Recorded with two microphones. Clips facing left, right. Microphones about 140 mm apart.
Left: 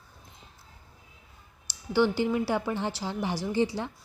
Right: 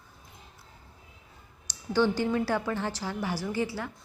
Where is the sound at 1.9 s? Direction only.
15° left (ahead or behind).